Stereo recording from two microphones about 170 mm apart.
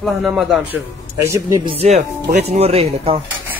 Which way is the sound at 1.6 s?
35° right (ahead or behind).